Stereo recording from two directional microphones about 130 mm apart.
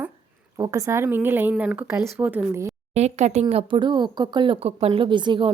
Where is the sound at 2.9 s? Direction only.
60° right (ahead or behind).